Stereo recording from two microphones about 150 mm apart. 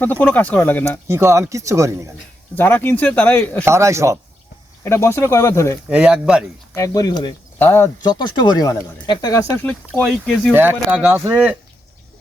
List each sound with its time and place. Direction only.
0.0 s speech: 10° left (ahead or behind)
1.0 s speech: 15° right (ahead or behind)
2.6 s speech: 15° left (ahead or behind)
3.7 s speech: 20° right (ahead or behind)
4.8 s speech: 15° left (ahead or behind)
5.9 s speech: 5° right (ahead or behind)
6.7 s speech: 20° left (ahead or behind)
7.6 s speech: 15° left (ahead or behind)
8.0 s speech: 30° left (ahead or behind)
9.9 s speech: centre (ahead or behind)
10.5 s speech: 15° right (ahead or behind)